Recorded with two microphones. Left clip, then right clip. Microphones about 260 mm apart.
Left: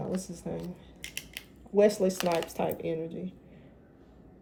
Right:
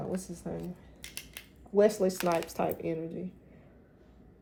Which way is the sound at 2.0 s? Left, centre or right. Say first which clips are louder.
Left 1 dB; right.